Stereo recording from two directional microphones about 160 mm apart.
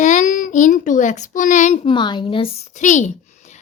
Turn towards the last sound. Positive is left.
turn(degrees=45)  # may be behind; listen again after turning